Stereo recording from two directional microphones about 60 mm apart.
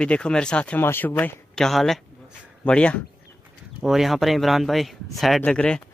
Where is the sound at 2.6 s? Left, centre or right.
Centre.